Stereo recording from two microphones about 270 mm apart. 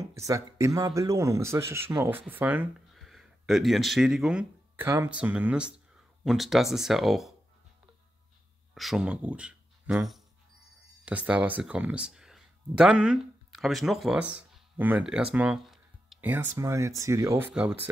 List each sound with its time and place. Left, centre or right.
0.1 s speech: centre
8.7 s speech: centre